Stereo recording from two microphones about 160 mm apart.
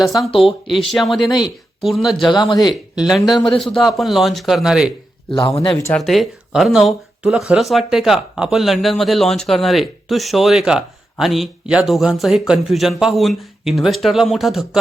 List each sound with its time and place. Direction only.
0.3 s speech: 35° left (ahead or behind)
0.9 s speech: centre (ahead or behind)
1.2 s speech: 30° left (ahead or behind)
1.8 s speech: centre (ahead or behind)
2.3 s speech: 25° left (ahead or behind)
3.0 s speech: centre (ahead or behind)
5.7 s speech: 20° left (ahead or behind)
6.0 s speech: centre (ahead or behind)